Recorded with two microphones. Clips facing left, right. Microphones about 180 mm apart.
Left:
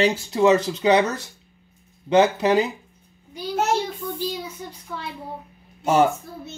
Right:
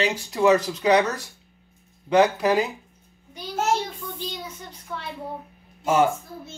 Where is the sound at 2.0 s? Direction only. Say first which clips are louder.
Left 1 dB; 25° left (ahead or behind).